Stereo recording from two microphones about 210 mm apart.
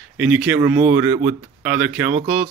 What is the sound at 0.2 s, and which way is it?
Speech, 5° right (ahead or behind).